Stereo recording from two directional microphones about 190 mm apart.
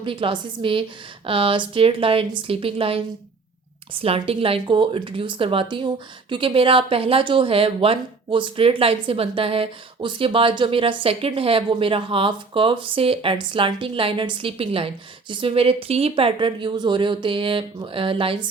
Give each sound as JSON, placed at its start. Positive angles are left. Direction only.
{"t": 0.0, "sound": "speech", "side_deg": -30}